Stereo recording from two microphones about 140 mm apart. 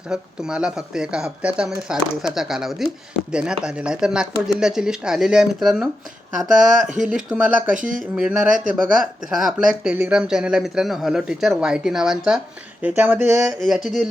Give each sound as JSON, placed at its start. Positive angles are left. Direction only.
{"t": 0.1, "sound": "speech", "side_deg": -5}
{"t": 7.8, "sound": "speech", "side_deg": -70}
{"t": 8.1, "sound": "speech", "side_deg": -5}
{"t": 13.0, "sound": "speech", "side_deg": -15}
{"t": 13.6, "sound": "speech", "side_deg": 0}